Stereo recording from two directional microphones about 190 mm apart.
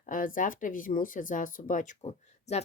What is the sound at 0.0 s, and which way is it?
Speech, 45° left (ahead or behind).